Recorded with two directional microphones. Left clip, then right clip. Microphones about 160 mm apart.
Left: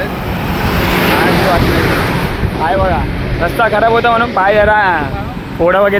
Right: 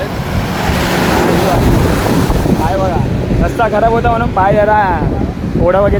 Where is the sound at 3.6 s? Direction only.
Centre (ahead or behind).